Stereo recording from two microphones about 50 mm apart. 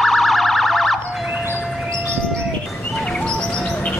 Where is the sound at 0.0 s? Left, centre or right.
Centre.